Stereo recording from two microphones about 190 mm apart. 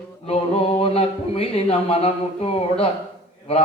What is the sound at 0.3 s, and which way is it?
Speech, 30° left (ahead or behind).